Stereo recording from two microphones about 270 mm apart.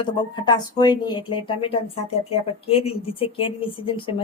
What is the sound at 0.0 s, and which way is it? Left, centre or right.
Speech, centre.